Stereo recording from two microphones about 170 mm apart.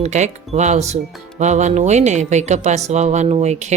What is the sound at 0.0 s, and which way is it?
Speech, 40° right (ahead or behind).